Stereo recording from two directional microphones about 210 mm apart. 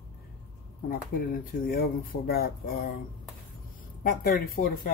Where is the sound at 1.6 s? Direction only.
45° left (ahead or behind).